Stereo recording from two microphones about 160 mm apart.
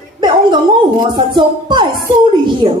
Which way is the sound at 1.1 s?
30° right (ahead or behind).